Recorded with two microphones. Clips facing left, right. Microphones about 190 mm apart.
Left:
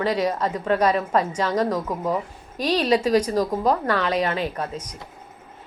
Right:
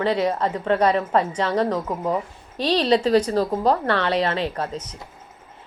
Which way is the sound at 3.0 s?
10° left (ahead or behind).